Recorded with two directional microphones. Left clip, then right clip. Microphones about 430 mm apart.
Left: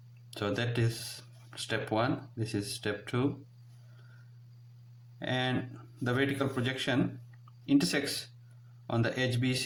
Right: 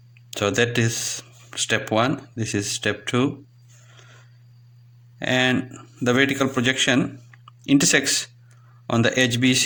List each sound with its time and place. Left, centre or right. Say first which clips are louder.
0.3 s speech: right 12 dB; left
5.2 s speech: right 12 dB; left